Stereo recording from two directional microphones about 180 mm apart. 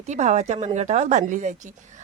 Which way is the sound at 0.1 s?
40° right (ahead or behind).